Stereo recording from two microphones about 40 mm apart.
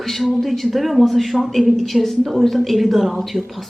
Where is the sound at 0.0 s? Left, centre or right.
Centre.